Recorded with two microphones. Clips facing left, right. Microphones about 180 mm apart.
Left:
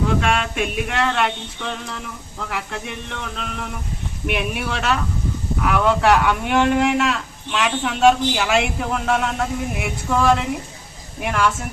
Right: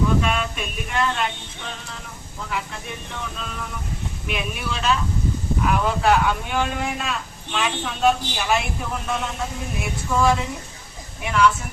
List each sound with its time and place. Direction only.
0.1 s speech: 75° left (ahead or behind)
11.2 s a woman's voice: 50° left (ahead or behind)